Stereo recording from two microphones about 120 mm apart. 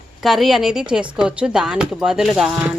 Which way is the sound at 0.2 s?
Centre (ahead or behind).